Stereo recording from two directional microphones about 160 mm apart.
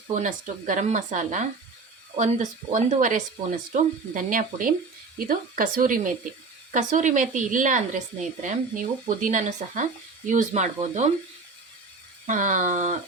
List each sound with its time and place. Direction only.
0.1 s a woman's voice: 55° right (ahead or behind)
6.7 s a woman's voice: 50° right (ahead or behind)
12.2 s a woman's voice: 50° right (ahead or behind)